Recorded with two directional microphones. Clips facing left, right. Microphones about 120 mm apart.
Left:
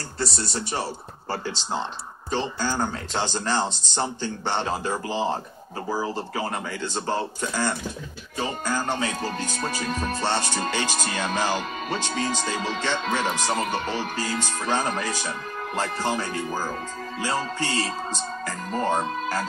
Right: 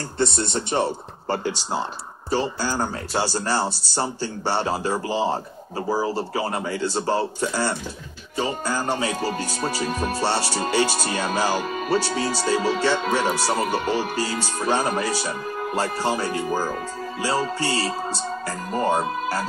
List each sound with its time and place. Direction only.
0.5 s speech: 25° right (ahead or behind)
2.3 s music: 10° right (ahead or behind)